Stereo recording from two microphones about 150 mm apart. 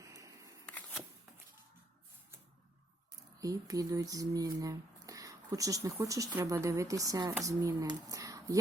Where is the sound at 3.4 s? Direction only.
25° right (ahead or behind).